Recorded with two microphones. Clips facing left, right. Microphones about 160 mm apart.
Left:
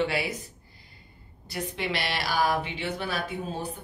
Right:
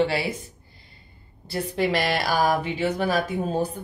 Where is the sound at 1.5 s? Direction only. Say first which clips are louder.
Right 7 dB; 40° right (ahead or behind).